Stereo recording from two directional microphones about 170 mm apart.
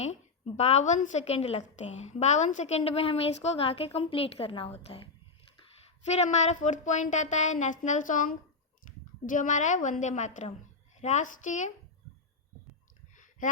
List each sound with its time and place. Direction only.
0.0 s a woman's voice: 40° left (ahead or behind)
6.1 s a woman's voice: 40° left (ahead or behind)